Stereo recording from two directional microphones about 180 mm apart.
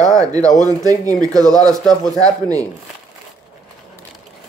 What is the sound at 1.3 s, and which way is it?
Speech, 5° left (ahead or behind).